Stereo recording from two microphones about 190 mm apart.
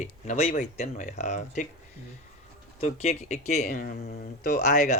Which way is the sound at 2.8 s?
35° left (ahead or behind).